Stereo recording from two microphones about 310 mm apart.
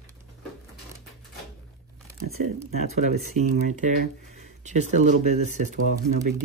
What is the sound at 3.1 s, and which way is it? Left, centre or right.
Speech, right.